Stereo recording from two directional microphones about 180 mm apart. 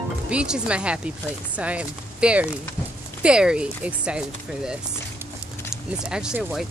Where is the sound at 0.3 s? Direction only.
5° right (ahead or behind).